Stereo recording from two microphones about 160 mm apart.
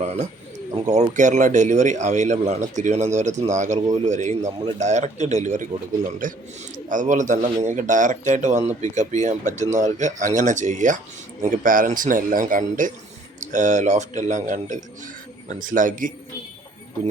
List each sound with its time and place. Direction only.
0.0 s a man's voice: 40° right (ahead or behind)